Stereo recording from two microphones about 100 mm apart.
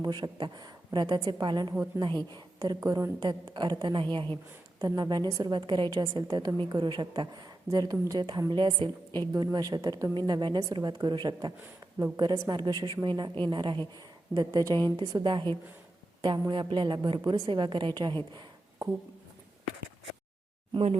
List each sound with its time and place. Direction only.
0.0 s a woman's voice: 45° right (ahead or behind)
4.8 s a woman's voice: 40° right (ahead or behind)
14.3 s a woman's voice: 40° right (ahead or behind)
15.2 s a woman's voice: 50° right (ahead or behind)